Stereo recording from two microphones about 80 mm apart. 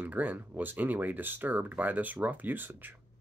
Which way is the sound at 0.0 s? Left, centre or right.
Right.